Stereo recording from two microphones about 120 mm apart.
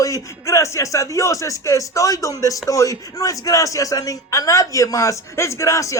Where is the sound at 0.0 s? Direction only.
25° left (ahead or behind).